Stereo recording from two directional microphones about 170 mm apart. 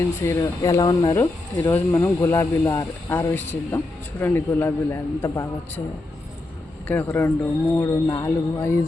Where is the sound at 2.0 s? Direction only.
15° left (ahead or behind).